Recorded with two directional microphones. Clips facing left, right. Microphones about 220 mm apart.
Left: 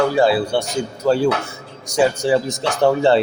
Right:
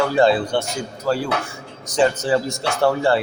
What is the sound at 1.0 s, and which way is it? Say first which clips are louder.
Speech: left 6 dB; 25° left (ahead or behind).